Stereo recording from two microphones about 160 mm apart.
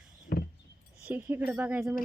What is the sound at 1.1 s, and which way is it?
Speech, 10° right (ahead or behind).